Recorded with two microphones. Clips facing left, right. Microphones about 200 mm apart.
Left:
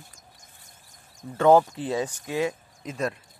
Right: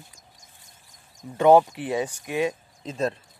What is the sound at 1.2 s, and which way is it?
Speech, 15° right (ahead or behind).